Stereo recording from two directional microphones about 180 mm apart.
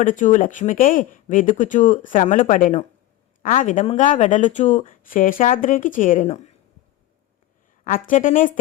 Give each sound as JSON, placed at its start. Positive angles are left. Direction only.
{"t": 0.0, "sound": "speech", "side_deg": 45}
{"t": 7.9, "sound": "speech", "side_deg": 50}